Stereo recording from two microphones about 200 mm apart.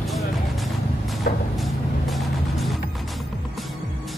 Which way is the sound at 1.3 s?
50° left (ahead or behind).